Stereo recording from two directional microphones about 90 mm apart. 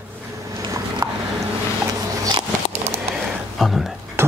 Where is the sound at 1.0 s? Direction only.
40° right (ahead or behind).